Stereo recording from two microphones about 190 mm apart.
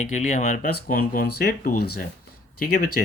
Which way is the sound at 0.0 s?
40° left (ahead or behind).